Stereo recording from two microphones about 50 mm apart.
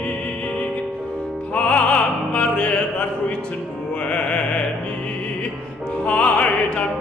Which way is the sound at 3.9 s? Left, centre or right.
Left.